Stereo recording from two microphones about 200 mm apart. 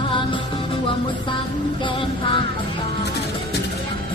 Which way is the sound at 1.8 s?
25° left (ahead or behind).